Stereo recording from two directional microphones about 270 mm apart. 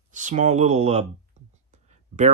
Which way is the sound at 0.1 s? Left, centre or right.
Right.